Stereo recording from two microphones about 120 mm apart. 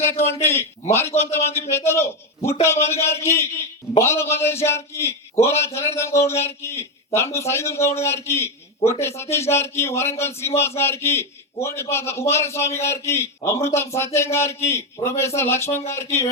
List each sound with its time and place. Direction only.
0.0 s a man's voice: 20° left (ahead or behind)